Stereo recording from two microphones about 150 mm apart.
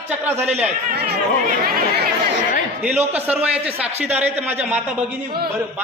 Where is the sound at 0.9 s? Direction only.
90° right.